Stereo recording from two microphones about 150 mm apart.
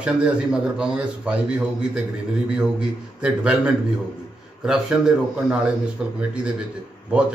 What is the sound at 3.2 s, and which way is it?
Speech, 5° right (ahead or behind).